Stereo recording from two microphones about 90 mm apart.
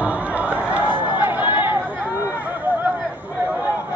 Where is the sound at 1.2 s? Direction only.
60° left (ahead or behind).